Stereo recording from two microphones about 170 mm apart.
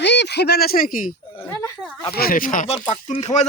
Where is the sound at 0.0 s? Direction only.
90° left; by 0.9 s 65° left (ahead or behind).